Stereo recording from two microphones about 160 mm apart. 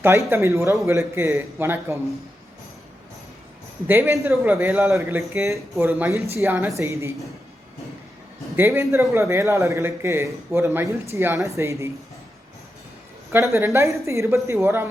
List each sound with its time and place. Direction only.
0.0 s a man's voice: 15° right (ahead or behind)
3.8 s a man's voice: 15° right (ahead or behind)
8.5 s a man's voice: 15° right (ahead or behind)
13.5 s a man's voice: 20° right (ahead or behind)